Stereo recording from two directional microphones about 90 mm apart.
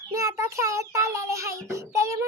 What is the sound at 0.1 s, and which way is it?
Child singing, 35° right (ahead or behind).